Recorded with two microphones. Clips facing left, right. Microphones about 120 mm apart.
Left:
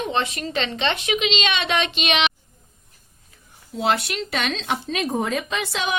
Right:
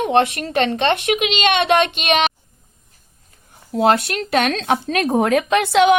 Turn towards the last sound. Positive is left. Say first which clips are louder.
# right 12 dB
turn(degrees=-65)  # may be behind; listen again after turning